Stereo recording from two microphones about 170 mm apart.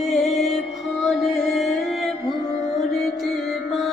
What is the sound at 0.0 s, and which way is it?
Music, centre (ahead or behind).